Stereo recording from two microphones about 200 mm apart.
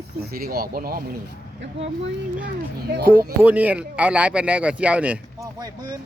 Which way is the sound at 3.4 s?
5° right (ahead or behind).